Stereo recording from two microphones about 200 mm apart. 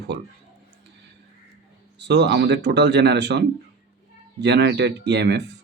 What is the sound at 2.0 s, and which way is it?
Speech, 60° right (ahead or behind).